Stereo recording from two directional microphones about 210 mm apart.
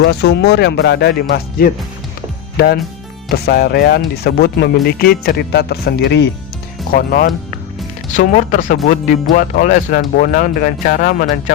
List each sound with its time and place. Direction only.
0.0 s speech: 50° left (ahead or behind)